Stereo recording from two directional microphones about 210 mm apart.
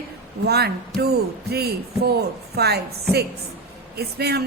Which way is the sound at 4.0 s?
50° right (ahead or behind).